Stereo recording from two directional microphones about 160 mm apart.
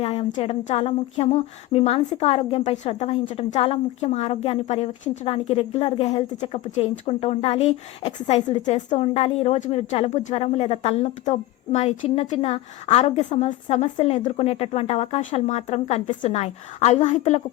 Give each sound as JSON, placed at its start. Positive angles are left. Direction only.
{"t": 0.0, "sound": "a woman's voice", "side_deg": 40}